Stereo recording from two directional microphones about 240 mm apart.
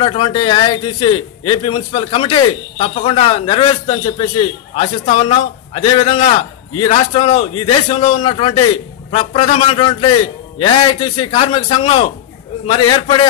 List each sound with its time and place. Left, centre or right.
0.0 s a man's voice: left